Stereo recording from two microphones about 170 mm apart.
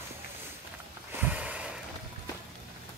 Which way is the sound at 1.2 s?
10° right (ahead or behind).